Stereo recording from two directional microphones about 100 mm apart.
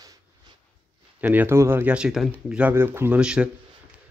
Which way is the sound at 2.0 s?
5° right (ahead or behind).